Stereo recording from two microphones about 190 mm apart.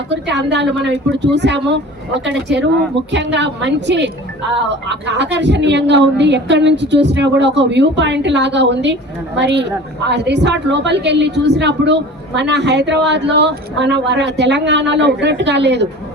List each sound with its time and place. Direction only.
0.1 s a woman's voice: 65° right (ahead or behind)